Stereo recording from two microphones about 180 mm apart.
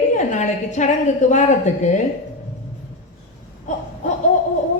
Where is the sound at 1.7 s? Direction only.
40° left (ahead or behind).